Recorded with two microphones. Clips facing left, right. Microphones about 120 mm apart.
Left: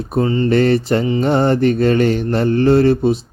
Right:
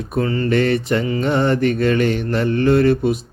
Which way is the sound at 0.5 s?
35° left (ahead or behind).